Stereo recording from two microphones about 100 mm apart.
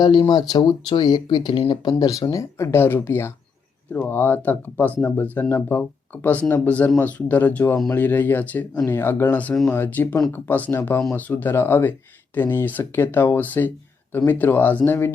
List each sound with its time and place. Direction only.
0.0 s speech: 45° left (ahead or behind); by 15.1 s 20° left (ahead or behind)